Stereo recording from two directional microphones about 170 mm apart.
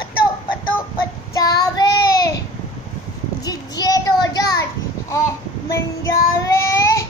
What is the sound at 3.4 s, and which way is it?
Child singing, 20° left (ahead or behind).